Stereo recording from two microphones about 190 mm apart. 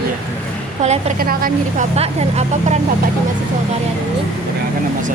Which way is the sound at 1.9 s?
35° right (ahead or behind).